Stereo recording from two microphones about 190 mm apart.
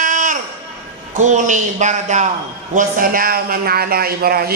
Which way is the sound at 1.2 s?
40° right (ahead or behind).